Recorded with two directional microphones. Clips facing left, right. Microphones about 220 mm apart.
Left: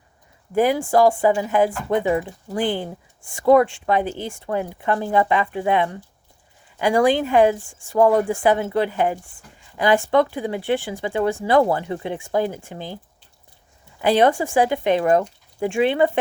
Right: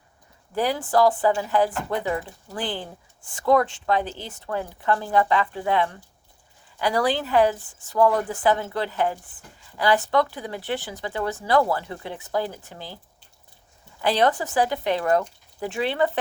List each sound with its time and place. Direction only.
0.5 s speech: 20° left (ahead or behind)
14.0 s speech: 15° left (ahead or behind)